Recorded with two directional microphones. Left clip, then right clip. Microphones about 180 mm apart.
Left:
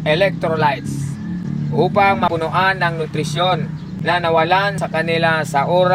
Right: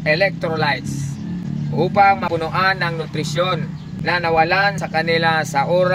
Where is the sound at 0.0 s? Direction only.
10° right (ahead or behind).